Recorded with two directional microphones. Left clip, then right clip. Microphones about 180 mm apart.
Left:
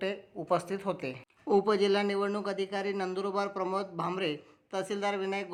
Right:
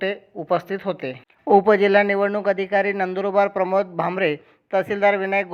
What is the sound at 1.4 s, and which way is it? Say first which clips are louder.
Speech: right 11 dB; 30° right (ahead or behind).